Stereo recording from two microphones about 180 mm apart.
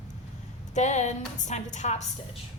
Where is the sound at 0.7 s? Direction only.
40° left (ahead or behind).